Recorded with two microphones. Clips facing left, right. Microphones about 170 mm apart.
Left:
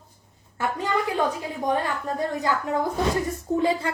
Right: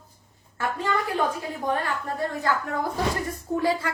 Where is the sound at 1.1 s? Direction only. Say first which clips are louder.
Left 1 dB; 20° left (ahead or behind).